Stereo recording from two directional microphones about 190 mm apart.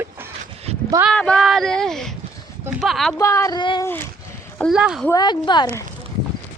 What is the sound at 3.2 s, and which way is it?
Speech, 15° left (ahead or behind).